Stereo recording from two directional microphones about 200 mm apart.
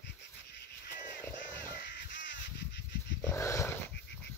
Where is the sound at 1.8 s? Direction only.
65° left (ahead or behind).